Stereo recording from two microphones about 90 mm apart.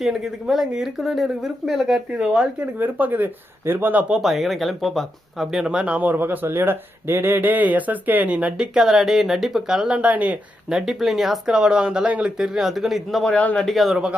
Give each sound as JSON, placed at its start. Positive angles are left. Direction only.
{"t": 0.0, "sound": "speech", "side_deg": -5}
{"t": 2.7, "sound": "speech", "side_deg": -20}
{"t": 4.1, "sound": "speech", "side_deg": 0}
{"t": 10.7, "sound": "speech", "side_deg": -5}